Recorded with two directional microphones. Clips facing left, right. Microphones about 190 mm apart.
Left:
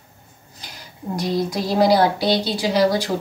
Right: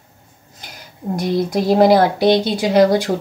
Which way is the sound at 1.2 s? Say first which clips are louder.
Right 4 dB; 50° right (ahead or behind).